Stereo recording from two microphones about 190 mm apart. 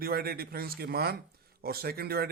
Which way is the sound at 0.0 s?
55° right (ahead or behind).